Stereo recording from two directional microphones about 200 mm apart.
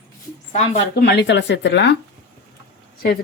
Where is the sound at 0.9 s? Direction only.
55° left (ahead or behind).